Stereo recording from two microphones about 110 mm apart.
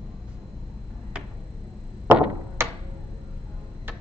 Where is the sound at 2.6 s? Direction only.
25° right (ahead or behind).